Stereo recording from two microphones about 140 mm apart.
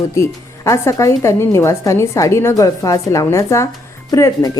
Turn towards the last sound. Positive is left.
turn(degrees=25)  # may be behind; listen again after turning